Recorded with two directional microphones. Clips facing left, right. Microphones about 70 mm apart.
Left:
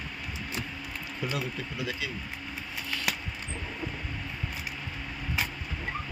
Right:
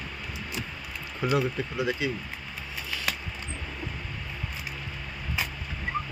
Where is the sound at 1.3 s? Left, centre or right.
Right.